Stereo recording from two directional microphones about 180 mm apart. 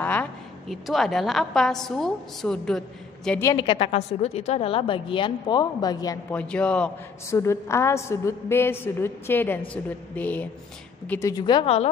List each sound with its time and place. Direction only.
0.0 s a woman's voice: 10° left (ahead or behind)
3.5 s a woman's voice: 30° left (ahead or behind)
6.3 s a woman's voice: 5° left (ahead or behind); by 11.9 s 35° left (ahead or behind)